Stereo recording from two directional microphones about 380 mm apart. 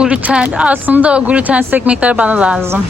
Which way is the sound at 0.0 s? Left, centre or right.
Centre.